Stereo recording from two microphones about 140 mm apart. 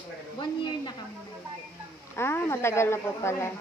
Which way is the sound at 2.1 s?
20° left (ahead or behind).